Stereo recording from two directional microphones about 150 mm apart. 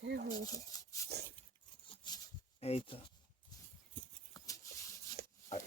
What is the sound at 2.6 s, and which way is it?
Speech, 40° left (ahead or behind).